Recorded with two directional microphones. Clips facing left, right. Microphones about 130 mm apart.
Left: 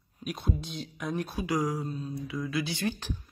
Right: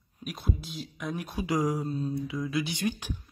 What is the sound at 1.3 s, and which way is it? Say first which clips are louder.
Speech: right 4 dB; 20° right (ahead or behind).